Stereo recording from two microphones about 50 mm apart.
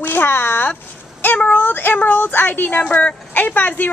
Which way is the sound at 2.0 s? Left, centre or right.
Left.